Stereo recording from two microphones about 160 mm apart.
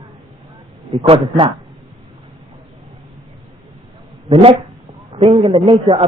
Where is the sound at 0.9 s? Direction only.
35° right (ahead or behind).